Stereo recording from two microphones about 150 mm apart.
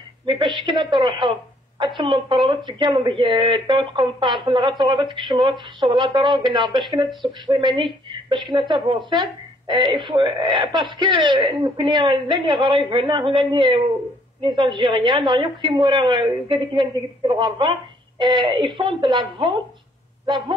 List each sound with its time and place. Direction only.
0.3 s a woman's voice: 30° right (ahead or behind)